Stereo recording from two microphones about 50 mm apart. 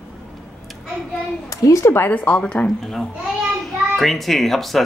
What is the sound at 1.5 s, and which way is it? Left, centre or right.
Speech, left.